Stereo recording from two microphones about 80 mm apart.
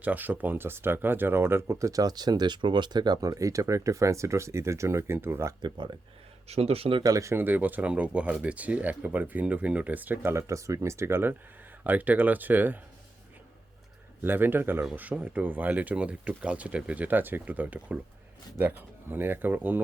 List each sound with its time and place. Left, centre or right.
0.0 s speech: right
3.2 s speech: right
5.6 s speech: right
7.0 s speech: right
7.3 s speech: right
10.3 s speech: right
14.2 s speech: right